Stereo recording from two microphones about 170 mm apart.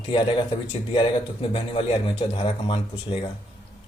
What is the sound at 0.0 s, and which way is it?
A man's voice, 30° left (ahead or behind).